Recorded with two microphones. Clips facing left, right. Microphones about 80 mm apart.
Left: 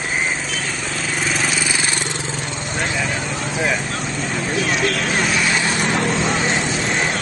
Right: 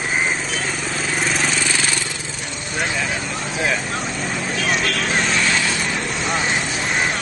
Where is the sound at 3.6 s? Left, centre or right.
Centre.